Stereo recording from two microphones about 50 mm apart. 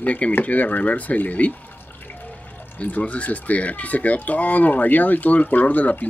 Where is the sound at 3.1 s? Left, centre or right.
Left.